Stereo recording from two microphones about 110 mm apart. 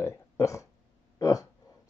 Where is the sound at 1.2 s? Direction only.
30° left (ahead or behind).